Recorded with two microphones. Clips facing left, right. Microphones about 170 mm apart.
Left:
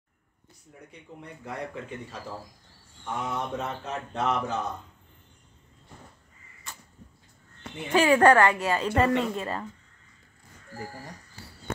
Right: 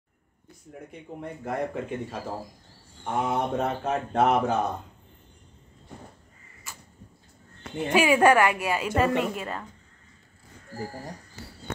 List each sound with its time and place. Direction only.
0.7 s speech: 50° right (ahead or behind)
6.7 s arrow: 5° right (ahead or behind)
7.9 s a woman's voice: 10° right (ahead or behind)